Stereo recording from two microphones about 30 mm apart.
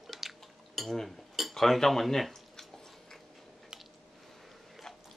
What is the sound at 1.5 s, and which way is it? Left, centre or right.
Speech, centre.